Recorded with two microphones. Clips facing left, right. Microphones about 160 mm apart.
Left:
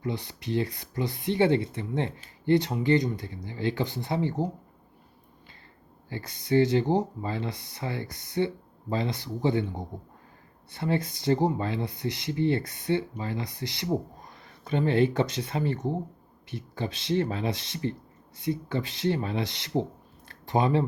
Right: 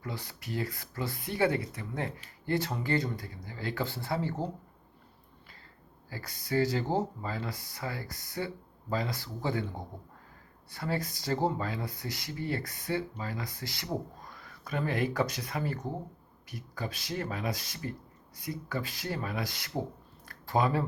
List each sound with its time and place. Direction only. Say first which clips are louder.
0.0 s speech: left 8 dB; 20° left (ahead or behind)
6.1 s speech: left 7 dB; 25° left (ahead or behind)
20.2 s a sound: left 3 dB; 25° left (ahead or behind)